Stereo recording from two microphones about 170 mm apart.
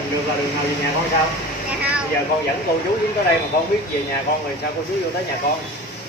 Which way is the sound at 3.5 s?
65° left (ahead or behind).